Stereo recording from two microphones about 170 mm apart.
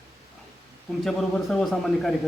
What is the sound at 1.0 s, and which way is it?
A man's voice, 5° left (ahead or behind).